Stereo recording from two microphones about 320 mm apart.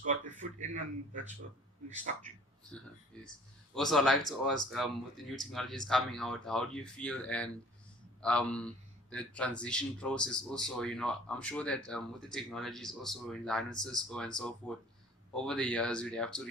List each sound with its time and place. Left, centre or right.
0.0 s a man's voice: right
3.8 s a man's voice: centre